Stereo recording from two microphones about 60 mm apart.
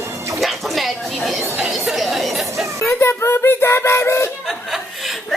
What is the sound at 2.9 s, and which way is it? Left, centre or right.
Music, left.